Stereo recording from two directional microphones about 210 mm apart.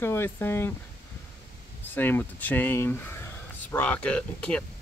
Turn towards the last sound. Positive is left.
turn(degrees=5)  # may be behind; listen again after turning